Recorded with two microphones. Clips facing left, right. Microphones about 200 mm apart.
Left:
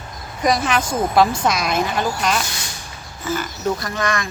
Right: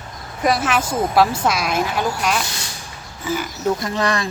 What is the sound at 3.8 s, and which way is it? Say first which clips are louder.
Speech: right 2 dB; 30° right (ahead or behind).